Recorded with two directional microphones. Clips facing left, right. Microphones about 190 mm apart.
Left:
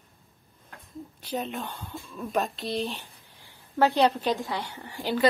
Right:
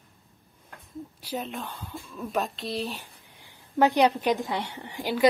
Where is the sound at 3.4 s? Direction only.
15° right (ahead or behind).